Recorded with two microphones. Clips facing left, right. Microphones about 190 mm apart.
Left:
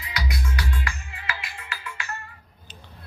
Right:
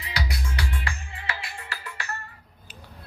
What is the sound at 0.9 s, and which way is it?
Music, 30° right (ahead or behind).